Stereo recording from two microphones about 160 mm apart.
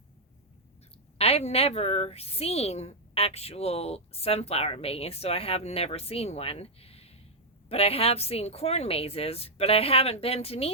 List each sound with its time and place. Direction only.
1.2 s a woman's voice: 40° left (ahead or behind)